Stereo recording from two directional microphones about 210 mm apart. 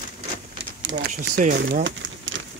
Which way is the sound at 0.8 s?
60° right (ahead or behind).